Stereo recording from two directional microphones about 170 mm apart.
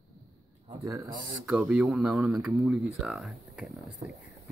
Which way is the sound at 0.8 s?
20° right (ahead or behind).